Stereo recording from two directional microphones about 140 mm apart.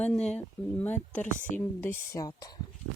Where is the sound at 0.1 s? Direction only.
5° left (ahead or behind).